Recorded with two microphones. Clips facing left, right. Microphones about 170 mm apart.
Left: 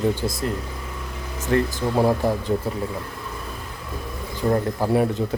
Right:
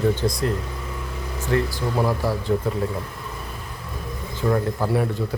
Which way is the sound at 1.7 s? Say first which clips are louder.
Left 3 dB; 20° left (ahead or behind).